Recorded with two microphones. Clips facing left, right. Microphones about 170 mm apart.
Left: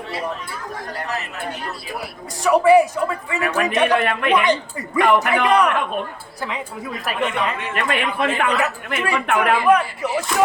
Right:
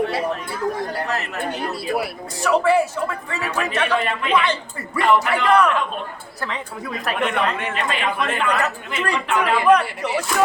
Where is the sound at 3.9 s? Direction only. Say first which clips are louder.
Left 3 dB; 60° left (ahead or behind).